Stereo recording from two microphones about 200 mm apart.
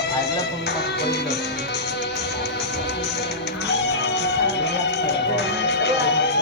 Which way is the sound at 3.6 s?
60° left (ahead or behind).